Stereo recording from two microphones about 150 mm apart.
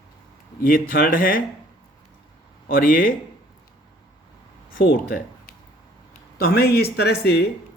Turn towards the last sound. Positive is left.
turn(degrees=90)